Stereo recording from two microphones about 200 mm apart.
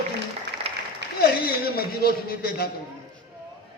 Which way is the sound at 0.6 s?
30° right (ahead or behind).